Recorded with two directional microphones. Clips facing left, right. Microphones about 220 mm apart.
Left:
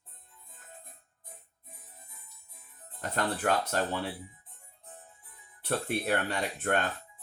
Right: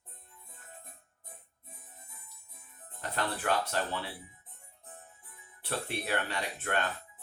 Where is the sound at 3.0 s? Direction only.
45° left (ahead or behind).